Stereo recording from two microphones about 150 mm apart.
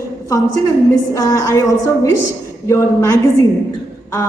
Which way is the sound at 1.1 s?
20° left (ahead or behind).